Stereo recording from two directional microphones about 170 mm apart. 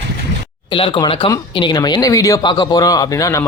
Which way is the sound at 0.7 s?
30° left (ahead or behind).